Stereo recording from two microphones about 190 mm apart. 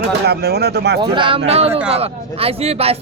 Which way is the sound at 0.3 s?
60° right (ahead or behind).